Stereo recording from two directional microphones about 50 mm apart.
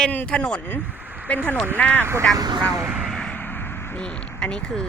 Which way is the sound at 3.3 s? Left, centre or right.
Left.